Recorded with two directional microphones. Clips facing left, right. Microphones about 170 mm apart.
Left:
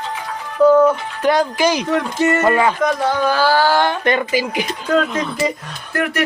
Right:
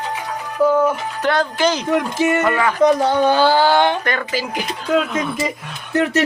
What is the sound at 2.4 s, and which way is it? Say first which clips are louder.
Speech: left 3 dB; 25° left (ahead or behind).